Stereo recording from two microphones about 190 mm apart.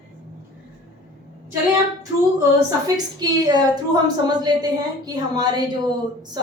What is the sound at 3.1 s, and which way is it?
A woman's voice, 20° right (ahead or behind).